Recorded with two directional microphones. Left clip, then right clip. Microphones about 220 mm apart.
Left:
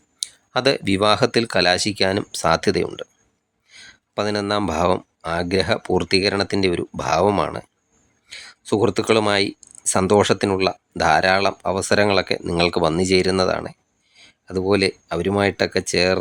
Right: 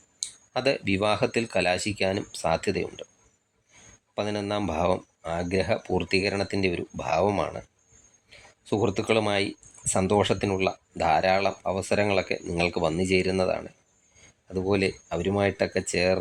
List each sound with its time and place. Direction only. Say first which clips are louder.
0.2 s speech: left 7 dB; 20° left (ahead or behind)